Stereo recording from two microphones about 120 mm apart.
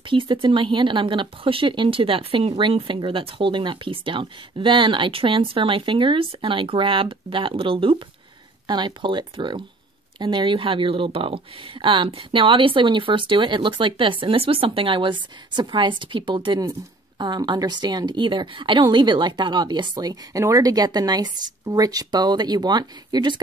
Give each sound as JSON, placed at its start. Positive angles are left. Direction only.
{"t": 0.0, "sound": "a woman's voice", "side_deg": -45}